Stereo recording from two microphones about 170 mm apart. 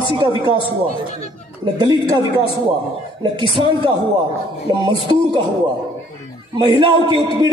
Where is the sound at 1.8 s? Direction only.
25° right (ahead or behind).